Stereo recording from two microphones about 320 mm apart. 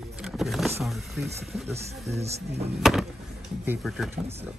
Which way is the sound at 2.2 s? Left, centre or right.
Centre.